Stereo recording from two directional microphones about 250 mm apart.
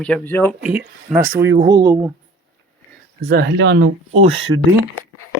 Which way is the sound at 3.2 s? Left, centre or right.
Right.